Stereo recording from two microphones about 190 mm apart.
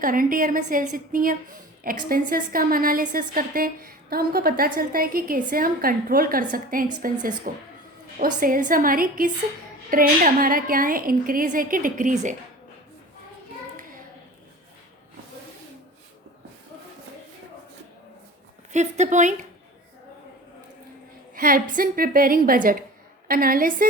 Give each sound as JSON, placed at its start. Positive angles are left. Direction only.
{"t": 0.0, "sound": "a woman's voice", "side_deg": -45}
{"t": 8.4, "sound": "a woman's voice", "side_deg": -45}
{"t": 18.7, "sound": "speech", "side_deg": -40}
{"t": 21.3, "sound": "a woman's voice", "side_deg": -50}